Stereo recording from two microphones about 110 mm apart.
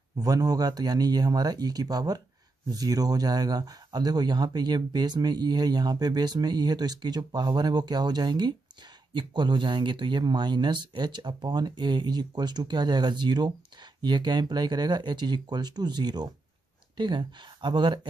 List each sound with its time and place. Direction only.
0.2 s speech: 35° right (ahead or behind)